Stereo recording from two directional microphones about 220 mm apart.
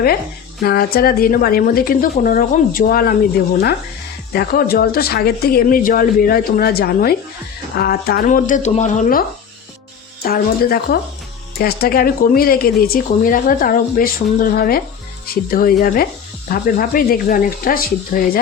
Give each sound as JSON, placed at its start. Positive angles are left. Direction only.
{"t": 0.6, "sound": "speech", "side_deg": 45}
{"t": 10.2, "sound": "speech", "side_deg": 45}